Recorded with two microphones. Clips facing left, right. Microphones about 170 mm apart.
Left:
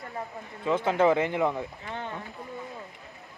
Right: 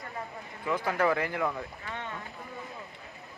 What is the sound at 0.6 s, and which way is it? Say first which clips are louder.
Speech: left 5 dB; 20° left (ahead or behind).